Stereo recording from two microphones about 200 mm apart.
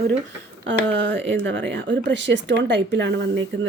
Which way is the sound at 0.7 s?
65° right (ahead or behind).